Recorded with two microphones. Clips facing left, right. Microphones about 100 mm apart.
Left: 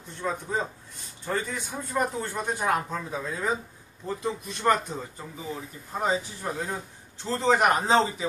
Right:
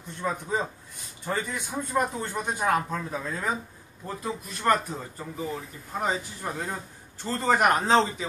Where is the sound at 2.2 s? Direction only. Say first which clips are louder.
Even; 15° right (ahead or behind).